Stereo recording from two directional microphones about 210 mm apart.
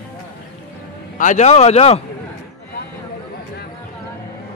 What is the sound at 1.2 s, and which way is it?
Speech, 35° left (ahead or behind).